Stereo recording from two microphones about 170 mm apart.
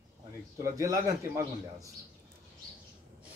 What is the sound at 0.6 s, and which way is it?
Speech, 20° right (ahead or behind).